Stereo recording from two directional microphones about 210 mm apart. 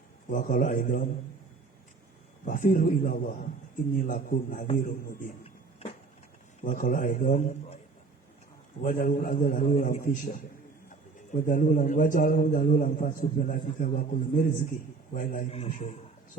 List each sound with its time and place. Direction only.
0.3 s a man's voice: 40° left (ahead or behind)
2.4 s a man's voice: 40° left (ahead or behind)
6.6 s a man's voice: 40° left (ahead or behind)
8.8 s a man's voice: 40° left (ahead or behind)
15.4 s a man's voice: 30° left (ahead or behind)